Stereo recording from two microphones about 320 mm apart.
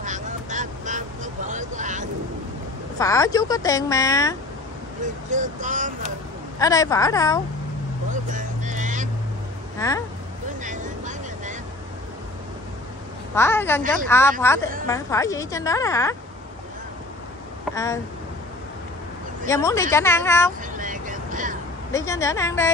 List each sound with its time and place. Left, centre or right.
0.0 s vehicle: right
3.0 s a woman's voice: centre
5.3 s speech: right
6.6 s a woman's voice: centre
8.1 s vehicle: right
9.8 s speech: centre
10.6 s vehicle: right
13.3 s a woman's voice: centre
19.4 s a woman's voice: centre
20.7 s vehicle: right
21.9 s a woman's voice: centre